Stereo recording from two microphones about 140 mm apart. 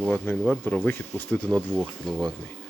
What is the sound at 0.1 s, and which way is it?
Speech, 10° left (ahead or behind).